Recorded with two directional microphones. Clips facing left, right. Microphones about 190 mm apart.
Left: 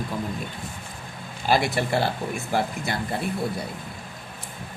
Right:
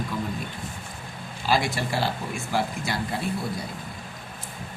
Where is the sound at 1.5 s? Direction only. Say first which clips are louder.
Left 3 dB; 55° left (ahead or behind).